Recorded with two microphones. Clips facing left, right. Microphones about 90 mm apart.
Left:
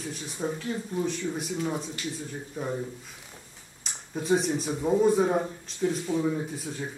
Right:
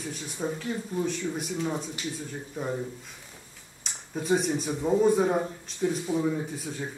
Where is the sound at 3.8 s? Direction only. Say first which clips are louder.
Even; centre (ahead or behind).